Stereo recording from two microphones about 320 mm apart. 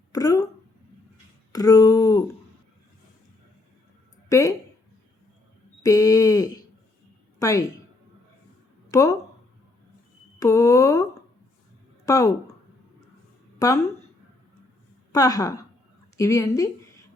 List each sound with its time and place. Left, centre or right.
0.1 s a sound: centre
1.5 s speech: centre
4.3 s speech: centre
5.8 s a sound: centre
7.3 s speech: centre
8.9 s speech: centre
10.4 s speech: centre
13.6 s speech: centre
15.1 s speech: centre